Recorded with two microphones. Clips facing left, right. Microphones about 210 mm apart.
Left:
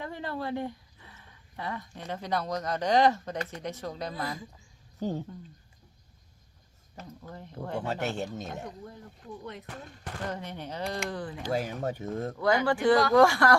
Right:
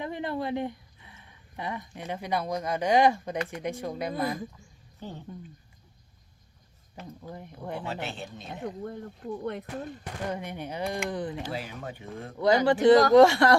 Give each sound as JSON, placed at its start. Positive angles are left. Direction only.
{"t": 0.0, "sound": "speech", "side_deg": -20}
{"t": 5.0, "sound": "speech", "side_deg": 40}
{"t": 7.3, "sound": "speech", "side_deg": -15}
{"t": 7.9, "sound": "speech", "side_deg": 45}
{"t": 8.8, "sound": "speech", "side_deg": -55}
{"t": 10.0, "sound": "speech", "side_deg": -10}
{"t": 11.5, "sound": "speech", "side_deg": 45}
{"t": 12.6, "sound": "speech", "side_deg": -20}